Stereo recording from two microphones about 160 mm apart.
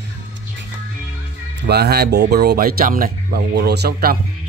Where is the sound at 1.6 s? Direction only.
90° right; by 4.1 s 70° right (ahead or behind).